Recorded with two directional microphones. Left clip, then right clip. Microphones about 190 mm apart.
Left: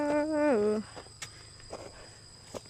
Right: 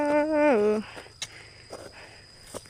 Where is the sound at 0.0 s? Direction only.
20° right (ahead or behind).